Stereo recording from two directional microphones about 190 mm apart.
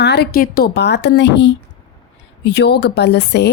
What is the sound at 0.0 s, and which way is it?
A woman's voice, 60° left (ahead or behind).